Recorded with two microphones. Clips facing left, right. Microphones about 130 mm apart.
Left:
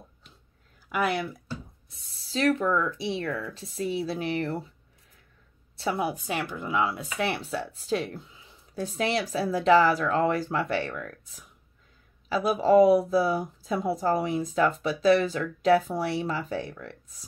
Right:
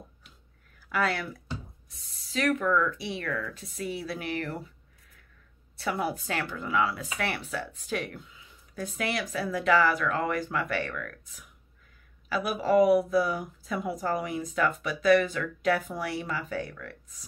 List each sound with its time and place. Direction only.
0.8 s speech: 20° left (ahead or behind)
5.8 s speech: 20° left (ahead or behind)